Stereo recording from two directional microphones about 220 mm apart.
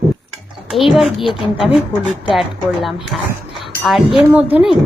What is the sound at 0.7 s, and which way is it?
Speech, centre (ahead or behind).